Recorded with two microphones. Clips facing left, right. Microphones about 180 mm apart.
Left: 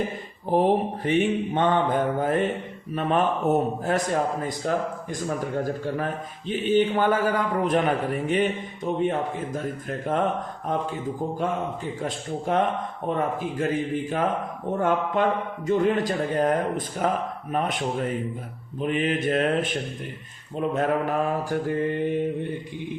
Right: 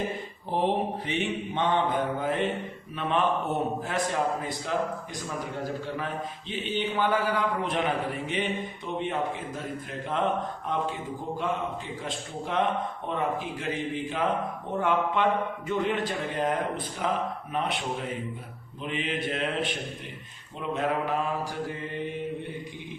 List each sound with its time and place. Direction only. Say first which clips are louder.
0.5 s mantra: left 5 dB; 50° left (ahead or behind)
12.0 s mantra: left 8 dB; 45° left (ahead or behind)